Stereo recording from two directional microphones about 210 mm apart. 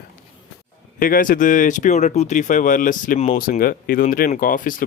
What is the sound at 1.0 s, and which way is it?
Speech, 40° left (ahead or behind).